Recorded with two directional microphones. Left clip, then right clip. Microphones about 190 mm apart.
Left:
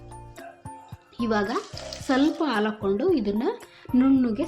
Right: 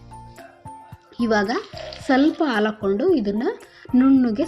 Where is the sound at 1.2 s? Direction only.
25° right (ahead or behind).